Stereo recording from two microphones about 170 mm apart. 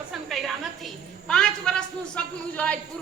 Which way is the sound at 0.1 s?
Centre (ahead or behind).